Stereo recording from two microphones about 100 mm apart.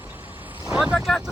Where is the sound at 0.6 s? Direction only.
10° right (ahead or behind).